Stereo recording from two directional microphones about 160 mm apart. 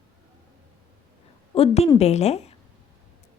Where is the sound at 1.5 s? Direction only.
40° left (ahead or behind).